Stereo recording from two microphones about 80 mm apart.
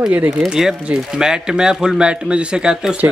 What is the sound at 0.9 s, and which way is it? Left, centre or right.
Speech, centre.